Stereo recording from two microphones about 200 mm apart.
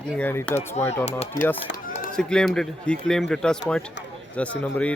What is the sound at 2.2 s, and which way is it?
Speech, 5° left (ahead or behind).